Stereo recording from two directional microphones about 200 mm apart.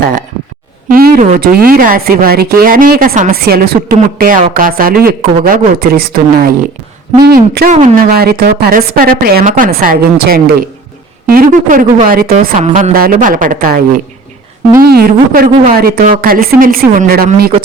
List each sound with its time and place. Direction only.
0.0 s speech: 40° right (ahead or behind)